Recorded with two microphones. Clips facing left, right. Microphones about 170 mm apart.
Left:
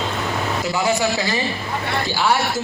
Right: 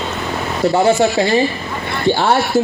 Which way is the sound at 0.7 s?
30° right (ahead or behind).